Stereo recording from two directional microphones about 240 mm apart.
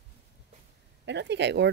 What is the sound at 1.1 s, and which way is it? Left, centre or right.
Speech, right.